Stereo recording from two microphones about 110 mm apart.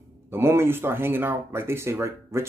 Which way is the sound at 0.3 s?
20° right (ahead or behind).